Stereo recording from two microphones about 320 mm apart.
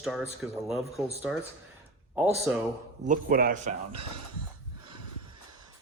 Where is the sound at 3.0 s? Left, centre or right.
Right.